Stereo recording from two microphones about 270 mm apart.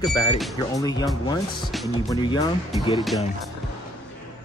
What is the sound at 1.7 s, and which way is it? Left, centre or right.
Speech, centre.